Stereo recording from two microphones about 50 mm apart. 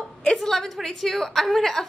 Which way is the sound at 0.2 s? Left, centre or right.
Centre.